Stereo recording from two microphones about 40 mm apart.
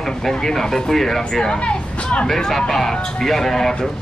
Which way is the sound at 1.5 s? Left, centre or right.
Left.